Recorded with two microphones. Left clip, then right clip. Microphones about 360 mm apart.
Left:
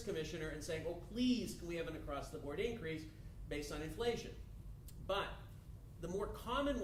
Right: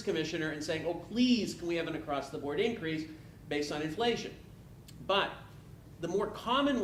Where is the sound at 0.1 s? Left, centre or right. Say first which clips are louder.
Right 10 dB; centre.